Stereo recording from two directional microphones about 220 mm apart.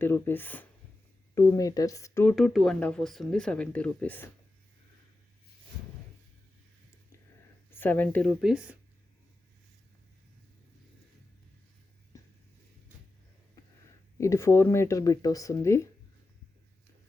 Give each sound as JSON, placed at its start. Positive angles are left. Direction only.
{"t": 0.0, "sound": "speech", "side_deg": 10}
{"t": 2.3, "sound": "speech", "side_deg": 0}
{"t": 7.7, "sound": "speech", "side_deg": 10}
{"t": 14.2, "sound": "speech", "side_deg": 15}